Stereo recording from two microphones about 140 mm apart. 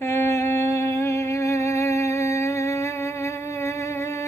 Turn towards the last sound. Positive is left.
turn(degrees=20)  # may be behind; listen again after turning